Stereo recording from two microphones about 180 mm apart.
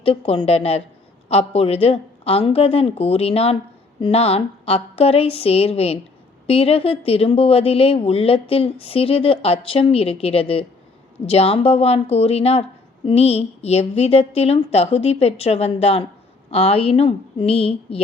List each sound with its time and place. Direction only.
0.0 s speech: 30° left (ahead or behind)